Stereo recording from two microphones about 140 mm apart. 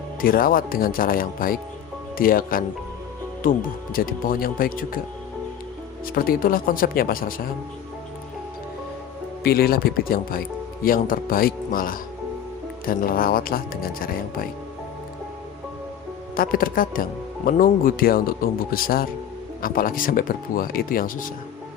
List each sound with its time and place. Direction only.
0.2 s speech: 90° left
3.9 s speech: 90° left
6.1 s speech: 90° left
9.4 s speech: 90° left
16.3 s speech: 90° left